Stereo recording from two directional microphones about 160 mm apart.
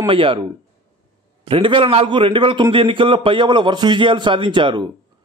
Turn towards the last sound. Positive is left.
turn(degrees=-30)  # may be behind; listen again after turning